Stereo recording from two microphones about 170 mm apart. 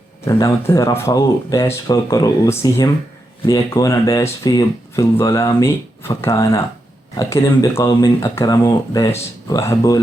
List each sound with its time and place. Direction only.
0.3 s speech: 20° left (ahead or behind)